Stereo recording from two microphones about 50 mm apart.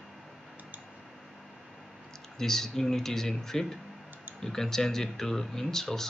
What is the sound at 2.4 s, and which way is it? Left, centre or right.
Speech, centre.